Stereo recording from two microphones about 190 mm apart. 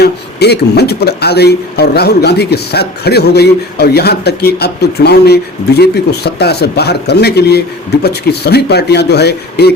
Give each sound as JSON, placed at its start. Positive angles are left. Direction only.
{"t": 0.0, "sound": "a man's voice", "side_deg": 60}